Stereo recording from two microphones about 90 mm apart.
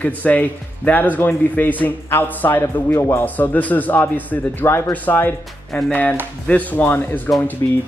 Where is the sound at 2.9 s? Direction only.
35° left (ahead or behind).